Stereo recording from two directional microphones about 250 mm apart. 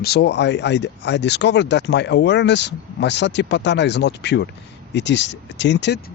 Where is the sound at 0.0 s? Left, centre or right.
Left.